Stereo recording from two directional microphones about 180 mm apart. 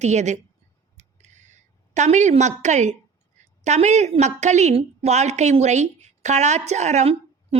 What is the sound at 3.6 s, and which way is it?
A woman's voice, 40° right (ahead or behind).